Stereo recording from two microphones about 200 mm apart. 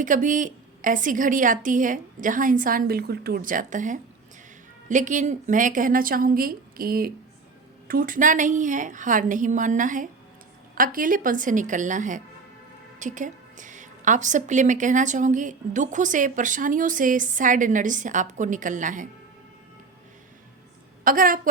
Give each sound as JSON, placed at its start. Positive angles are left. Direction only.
{"t": 0.0, "sound": "a woman's voice", "side_deg": -40}
{"t": 21.0, "sound": "a woman's voice", "side_deg": -45}